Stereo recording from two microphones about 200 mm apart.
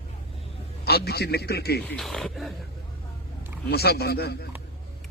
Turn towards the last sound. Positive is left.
turn(degrees=50)  # may be behind; listen again after turning